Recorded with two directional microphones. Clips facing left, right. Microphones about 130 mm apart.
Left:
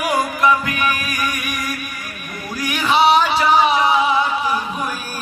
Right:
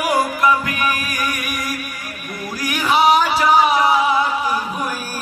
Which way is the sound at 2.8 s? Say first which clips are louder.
Even; 10° right (ahead or behind).